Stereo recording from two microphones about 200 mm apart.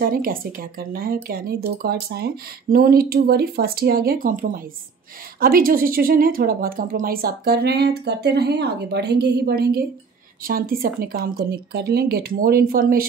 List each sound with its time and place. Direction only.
0.0 s speech: 45° right (ahead or behind)